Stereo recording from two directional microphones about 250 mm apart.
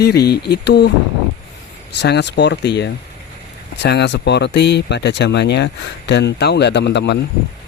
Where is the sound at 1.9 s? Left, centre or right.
Left.